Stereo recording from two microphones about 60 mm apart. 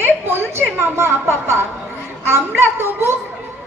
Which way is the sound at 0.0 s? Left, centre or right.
Right.